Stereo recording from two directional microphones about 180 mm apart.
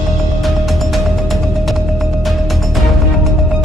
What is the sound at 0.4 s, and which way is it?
Music, centre (ahead or behind).